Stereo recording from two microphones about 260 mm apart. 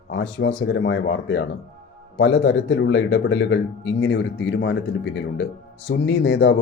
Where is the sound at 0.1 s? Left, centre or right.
Left.